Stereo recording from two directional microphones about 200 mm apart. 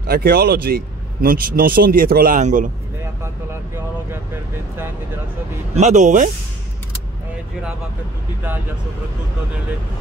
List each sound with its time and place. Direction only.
0.0 s speech: 50° right (ahead or behind)
5.8 s speech: 35° right (ahead or behind)